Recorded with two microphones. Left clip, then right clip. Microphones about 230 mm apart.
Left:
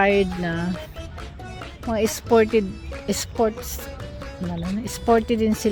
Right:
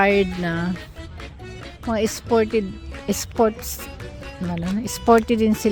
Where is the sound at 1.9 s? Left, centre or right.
Centre.